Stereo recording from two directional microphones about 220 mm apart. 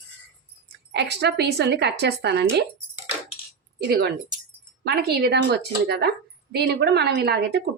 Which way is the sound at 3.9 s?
50° right (ahead or behind).